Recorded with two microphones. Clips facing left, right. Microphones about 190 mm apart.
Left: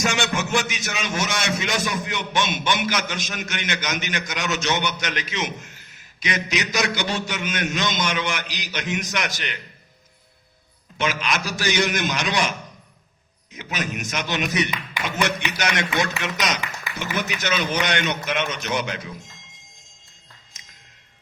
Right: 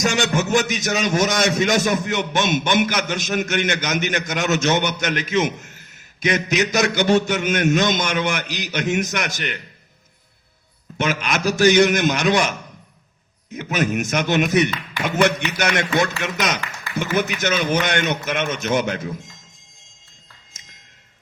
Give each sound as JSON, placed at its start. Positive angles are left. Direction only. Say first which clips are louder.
{"t": 0.0, "sound": "a man's voice", "louder": "right 4 dB", "side_deg": -40}
{"t": 10.9, "sound": "a man's voice", "louder": "right 2 dB", "side_deg": -50}
{"t": 13.6, "sound": "a man's voice", "louder": "right 8 dB", "side_deg": -50}